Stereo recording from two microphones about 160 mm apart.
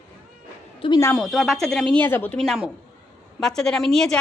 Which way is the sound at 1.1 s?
Centre (ahead or behind).